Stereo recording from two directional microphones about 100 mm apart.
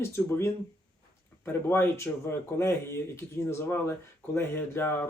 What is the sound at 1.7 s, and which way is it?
Speech, 25° left (ahead or behind).